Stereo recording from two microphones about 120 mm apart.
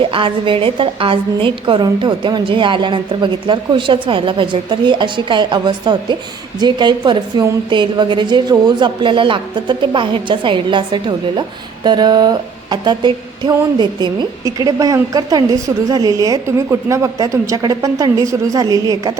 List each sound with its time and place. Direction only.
0.0 s a woman's voice: 45° right (ahead or behind)